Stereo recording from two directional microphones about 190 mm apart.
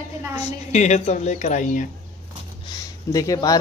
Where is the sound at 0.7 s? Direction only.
35° left (ahead or behind).